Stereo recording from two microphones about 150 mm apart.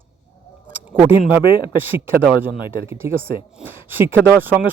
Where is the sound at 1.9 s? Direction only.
15° right (ahead or behind).